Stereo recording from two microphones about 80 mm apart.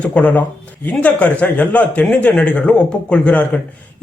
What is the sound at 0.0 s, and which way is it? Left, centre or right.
A man's voice, centre.